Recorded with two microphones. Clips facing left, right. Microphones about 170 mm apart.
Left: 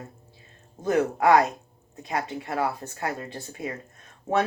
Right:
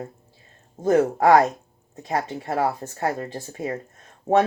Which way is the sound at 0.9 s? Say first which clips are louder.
Right 4 dB; 35° right (ahead or behind).